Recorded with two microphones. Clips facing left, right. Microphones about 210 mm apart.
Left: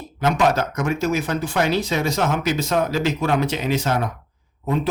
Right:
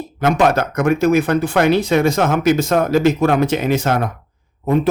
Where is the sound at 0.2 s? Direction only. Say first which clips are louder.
Right 4 dB; 55° right (ahead or behind).